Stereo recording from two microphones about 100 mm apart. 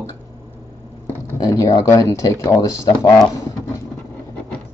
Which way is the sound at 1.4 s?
35° left (ahead or behind).